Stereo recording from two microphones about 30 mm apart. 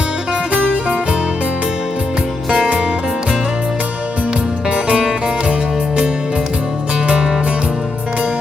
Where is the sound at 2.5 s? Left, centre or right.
Right.